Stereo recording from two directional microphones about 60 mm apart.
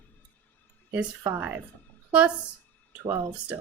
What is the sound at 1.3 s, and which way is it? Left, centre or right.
Speech, right.